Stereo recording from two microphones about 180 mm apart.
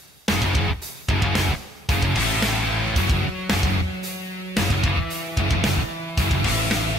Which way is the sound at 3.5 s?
Centre (ahead or behind).